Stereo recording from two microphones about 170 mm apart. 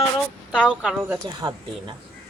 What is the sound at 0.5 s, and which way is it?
Speech, 5° right (ahead or behind).